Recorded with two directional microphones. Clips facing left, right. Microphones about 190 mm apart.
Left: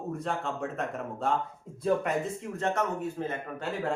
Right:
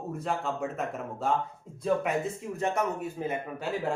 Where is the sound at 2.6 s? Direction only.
10° right (ahead or behind).